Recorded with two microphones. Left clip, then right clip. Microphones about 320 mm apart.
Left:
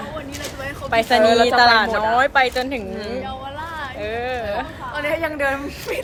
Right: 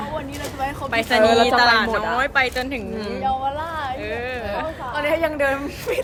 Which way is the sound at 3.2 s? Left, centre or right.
Right.